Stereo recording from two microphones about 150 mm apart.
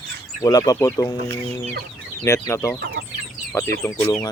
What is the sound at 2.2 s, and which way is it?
Speech, 20° left (ahead or behind).